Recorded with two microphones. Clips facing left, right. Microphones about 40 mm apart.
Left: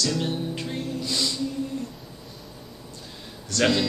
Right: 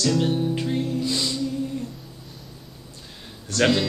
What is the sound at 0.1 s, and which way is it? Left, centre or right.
Music, centre.